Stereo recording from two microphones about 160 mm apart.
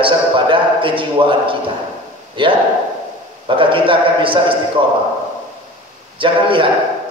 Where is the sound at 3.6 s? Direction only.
30° right (ahead or behind).